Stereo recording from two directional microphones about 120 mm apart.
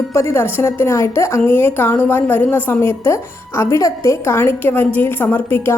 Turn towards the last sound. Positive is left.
turn(degrees=15)  # may be behind; listen again after turning